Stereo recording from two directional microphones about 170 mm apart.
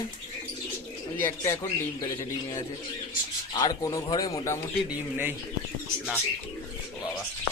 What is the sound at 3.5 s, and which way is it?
Speech, 25° left (ahead or behind).